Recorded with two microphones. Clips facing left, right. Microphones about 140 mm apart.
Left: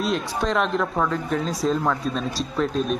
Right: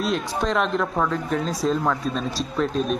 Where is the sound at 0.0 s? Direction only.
Centre (ahead or behind).